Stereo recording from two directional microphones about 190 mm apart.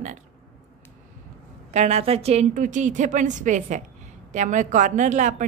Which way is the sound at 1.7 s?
35° right (ahead or behind).